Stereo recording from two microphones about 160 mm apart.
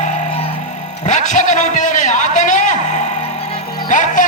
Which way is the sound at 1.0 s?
45° left (ahead or behind).